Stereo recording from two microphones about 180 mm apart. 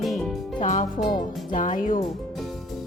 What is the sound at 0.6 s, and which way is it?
A woman's voice, 45° left (ahead or behind).